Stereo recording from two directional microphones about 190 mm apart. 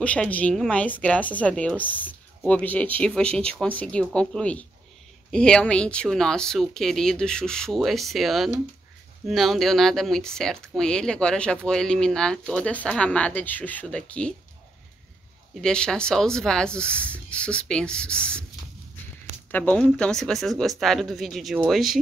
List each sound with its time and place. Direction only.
0.0 s speech: 5° left (ahead or behind)
15.6 s speech: 5° left (ahead or behind)
19.5 s speech: 10° left (ahead or behind)